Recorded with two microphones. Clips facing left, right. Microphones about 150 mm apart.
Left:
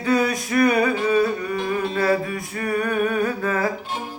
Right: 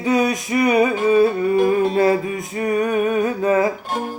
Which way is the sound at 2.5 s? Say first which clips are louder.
Right 4 dB; 20° right (ahead or behind).